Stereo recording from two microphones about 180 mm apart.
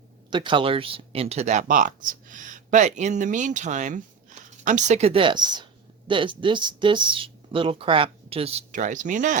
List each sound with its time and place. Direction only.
0.3 s speech: 25° right (ahead or behind); by 9.4 s 45° right (ahead or behind)